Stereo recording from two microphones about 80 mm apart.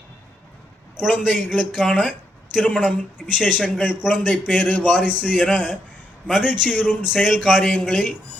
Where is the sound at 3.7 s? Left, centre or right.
Centre.